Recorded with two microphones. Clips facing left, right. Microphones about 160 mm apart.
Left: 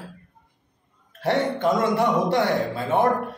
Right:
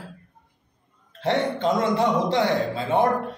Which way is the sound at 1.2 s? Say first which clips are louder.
Left 1 dB; 20° right (ahead or behind).